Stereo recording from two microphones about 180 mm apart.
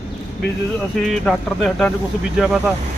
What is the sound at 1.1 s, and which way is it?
Speech, 5° left (ahead or behind).